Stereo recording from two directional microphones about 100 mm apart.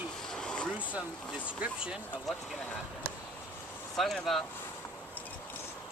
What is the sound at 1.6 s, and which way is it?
Speech, 10° right (ahead or behind).